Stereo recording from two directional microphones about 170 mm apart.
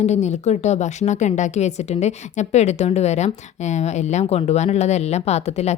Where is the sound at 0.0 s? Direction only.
40° left (ahead or behind).